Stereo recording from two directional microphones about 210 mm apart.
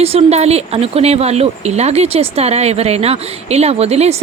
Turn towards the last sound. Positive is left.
turn(degrees=-30)  # may be behind; listen again after turning